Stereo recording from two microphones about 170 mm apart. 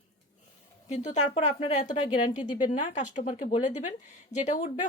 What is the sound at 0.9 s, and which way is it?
Speech, 40° left (ahead or behind).